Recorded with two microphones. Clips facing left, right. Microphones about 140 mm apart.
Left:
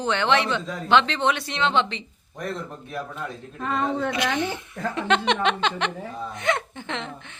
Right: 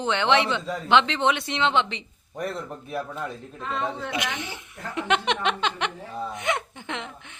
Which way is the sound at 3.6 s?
50° left (ahead or behind).